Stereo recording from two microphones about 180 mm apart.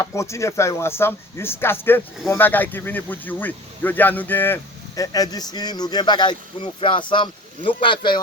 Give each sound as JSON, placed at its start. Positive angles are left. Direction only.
{"t": 0.0, "sound": "speech", "side_deg": 15}